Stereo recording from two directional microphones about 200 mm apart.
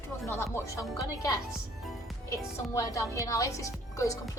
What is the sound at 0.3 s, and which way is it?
Speech, 15° left (ahead or behind).